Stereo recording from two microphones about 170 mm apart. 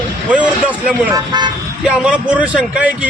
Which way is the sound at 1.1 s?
25° right (ahead or behind).